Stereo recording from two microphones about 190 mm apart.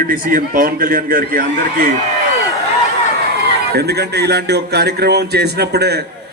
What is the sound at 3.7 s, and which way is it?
A man's voice, 60° right (ahead or behind).